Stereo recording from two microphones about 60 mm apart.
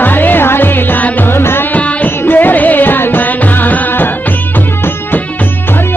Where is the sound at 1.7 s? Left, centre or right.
Left.